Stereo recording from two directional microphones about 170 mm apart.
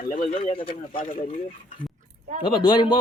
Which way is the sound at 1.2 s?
50° left (ahead or behind).